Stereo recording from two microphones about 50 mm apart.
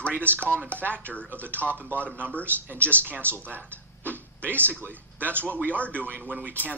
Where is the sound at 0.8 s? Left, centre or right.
Right.